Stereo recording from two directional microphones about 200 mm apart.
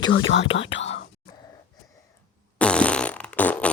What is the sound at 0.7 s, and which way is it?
Whispering, 65° left (ahead or behind).